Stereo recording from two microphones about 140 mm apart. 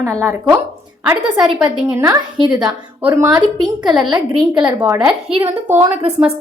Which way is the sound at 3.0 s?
10° right (ahead or behind).